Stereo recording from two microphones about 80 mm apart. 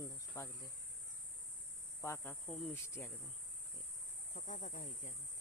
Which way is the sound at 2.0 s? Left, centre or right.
Left.